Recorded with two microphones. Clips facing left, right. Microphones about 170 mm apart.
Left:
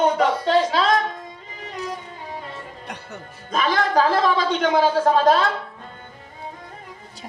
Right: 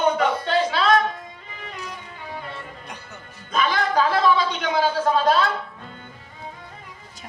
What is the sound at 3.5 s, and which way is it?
Speech, 40° left (ahead or behind).